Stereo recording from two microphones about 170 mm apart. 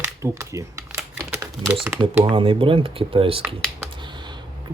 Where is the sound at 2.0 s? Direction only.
30° right (ahead or behind).